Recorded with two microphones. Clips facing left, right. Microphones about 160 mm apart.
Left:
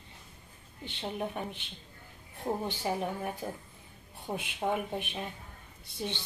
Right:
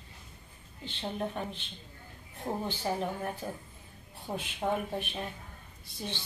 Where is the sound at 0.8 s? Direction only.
15° left (ahead or behind).